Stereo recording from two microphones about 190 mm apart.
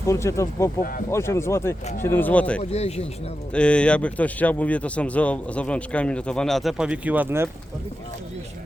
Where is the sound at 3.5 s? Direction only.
5° left (ahead or behind); by 7.5 s 10° right (ahead or behind).